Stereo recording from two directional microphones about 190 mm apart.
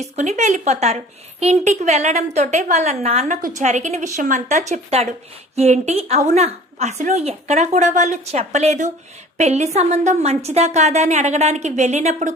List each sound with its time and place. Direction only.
0.0 s a woman's voice: 35° right (ahead or behind)